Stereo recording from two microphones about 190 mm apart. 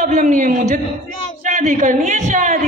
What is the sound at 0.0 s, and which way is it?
Speech, 40° right (ahead or behind).